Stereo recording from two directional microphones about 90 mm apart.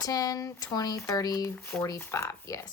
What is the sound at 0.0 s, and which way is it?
Speech, 40° left (ahead or behind).